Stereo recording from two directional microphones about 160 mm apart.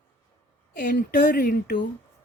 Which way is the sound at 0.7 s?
60° left (ahead or behind).